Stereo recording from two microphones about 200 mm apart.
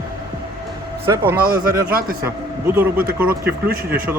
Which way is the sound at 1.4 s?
45° right (ahead or behind).